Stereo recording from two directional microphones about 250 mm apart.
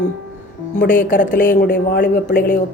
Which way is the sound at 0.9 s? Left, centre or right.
Left.